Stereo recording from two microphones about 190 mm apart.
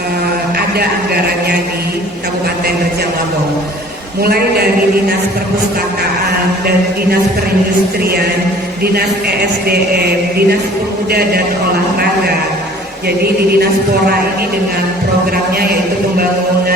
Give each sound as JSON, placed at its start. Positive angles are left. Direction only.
{"t": 0.8, "sound": "a man's voice", "side_deg": -55}
{"t": 4.2, "sound": "a man's voice", "side_deg": -55}
{"t": 8.8, "sound": "a man's voice", "side_deg": -55}
{"t": 13.1, "sound": "a man's voice", "side_deg": -55}
{"t": 15.5, "sound": "a man's voice", "side_deg": -50}